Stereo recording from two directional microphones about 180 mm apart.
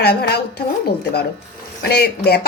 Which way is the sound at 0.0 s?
60° left (ahead or behind).